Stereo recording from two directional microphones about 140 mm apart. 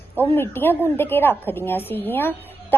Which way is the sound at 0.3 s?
15° left (ahead or behind).